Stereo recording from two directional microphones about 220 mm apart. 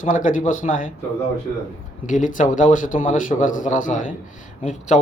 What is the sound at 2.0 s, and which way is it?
Speech, 35° left (ahead or behind).